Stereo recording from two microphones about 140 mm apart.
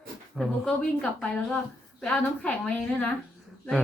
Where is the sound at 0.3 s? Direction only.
Centre (ahead or behind).